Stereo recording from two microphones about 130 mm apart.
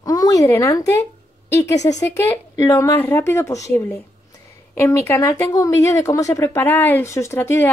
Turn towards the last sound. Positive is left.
turn(degrees=15)  # may be behind; listen again after turning